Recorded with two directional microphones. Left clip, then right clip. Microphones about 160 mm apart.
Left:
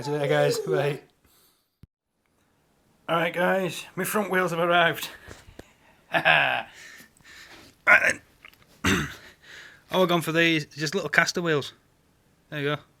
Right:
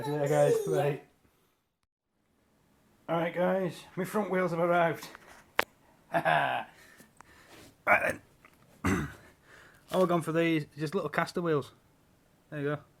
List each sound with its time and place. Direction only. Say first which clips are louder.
0.1 s speech: left 3 dB; 15° left (ahead or behind)
3.1 s speech: left 6 dB; 15° left (ahead or behind)
6.2 s a sound: left 7 dB; 5° left (ahead or behind)
7.9 s speech: left 8 dB; 10° right (ahead or behind)
8.1 s burping: left 9 dB; centre (ahead or behind)
9.5 s a sound: left 5 dB; 5° left (ahead or behind)
10.3 s speech: left 6 dB; centre (ahead or behind)
12.5 s speech: left 6 dB; 15° left (ahead or behind)